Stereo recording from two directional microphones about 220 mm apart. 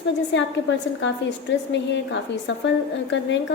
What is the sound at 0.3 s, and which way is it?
A woman's voice, 55° left (ahead or behind).